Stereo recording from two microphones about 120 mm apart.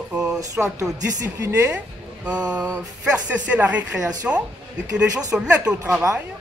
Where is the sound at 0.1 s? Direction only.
5° right (ahead or behind).